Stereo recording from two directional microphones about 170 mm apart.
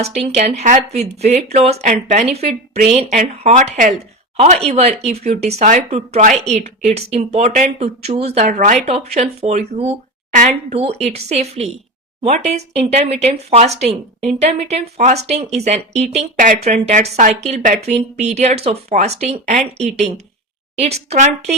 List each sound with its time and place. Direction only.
0.0 s speech: 40° right (ahead or behind)